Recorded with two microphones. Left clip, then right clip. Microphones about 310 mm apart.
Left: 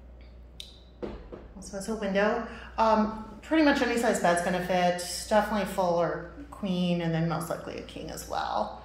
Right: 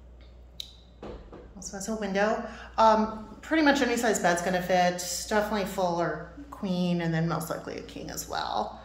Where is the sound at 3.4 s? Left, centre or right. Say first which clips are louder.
Even; centre.